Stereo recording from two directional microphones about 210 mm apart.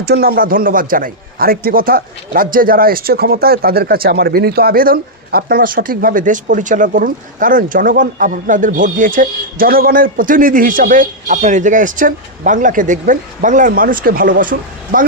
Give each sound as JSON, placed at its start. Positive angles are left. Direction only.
{"t": 0.0, "sound": "a man's voice", "side_deg": -45}